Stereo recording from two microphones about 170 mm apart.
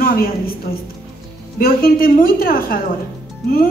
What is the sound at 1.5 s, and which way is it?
A man's voice, 60° left (ahead or behind).